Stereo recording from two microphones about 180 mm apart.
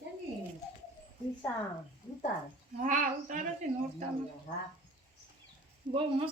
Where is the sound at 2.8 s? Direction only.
45° right (ahead or behind).